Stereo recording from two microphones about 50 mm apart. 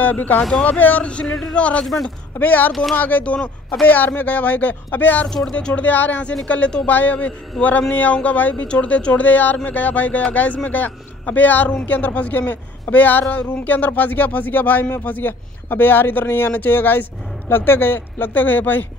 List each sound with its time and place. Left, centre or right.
0.0 s speech: left
1.2 s speech: centre
1.5 s speech: left
2.3 s speech: left
2.7 s speech: centre
3.0 s speech: left
5.3 s speech: centre
5.9 s speech: left
7.6 s speech: centre
7.9 s speech: left